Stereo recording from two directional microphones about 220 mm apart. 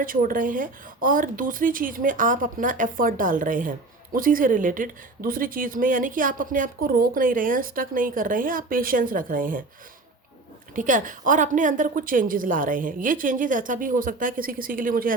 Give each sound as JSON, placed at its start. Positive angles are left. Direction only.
{"t": 0.0, "sound": "speech", "side_deg": -40}
{"t": 10.8, "sound": "speech", "side_deg": -35}